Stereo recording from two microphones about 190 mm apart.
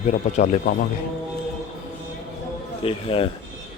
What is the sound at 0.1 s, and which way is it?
Speech, 40° left (ahead or behind).